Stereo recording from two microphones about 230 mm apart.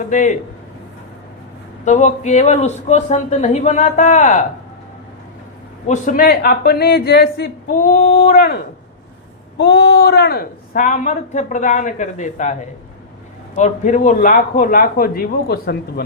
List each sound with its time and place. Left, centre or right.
0.1 s a woman's voice: left
1.8 s a woman's voice: left
5.9 s a woman's voice: left
13.6 s a woman's voice: left